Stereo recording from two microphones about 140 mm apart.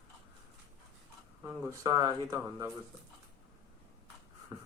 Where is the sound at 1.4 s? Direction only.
15° right (ahead or behind).